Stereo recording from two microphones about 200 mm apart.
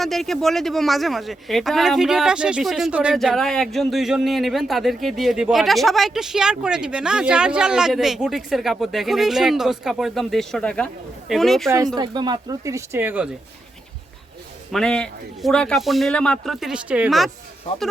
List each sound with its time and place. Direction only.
0.0 s speech: centre (ahead or behind)
11.9 s speech: 20° right (ahead or behind)
14.7 s speech: 5° left (ahead or behind)